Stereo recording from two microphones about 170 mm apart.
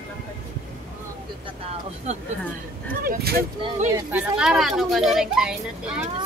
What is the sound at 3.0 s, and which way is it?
Speech, 65° right (ahead or behind).